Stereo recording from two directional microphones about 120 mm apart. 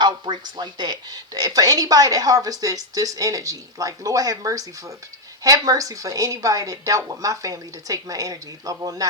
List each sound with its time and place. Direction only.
0.0 s speech: 40° right (ahead or behind)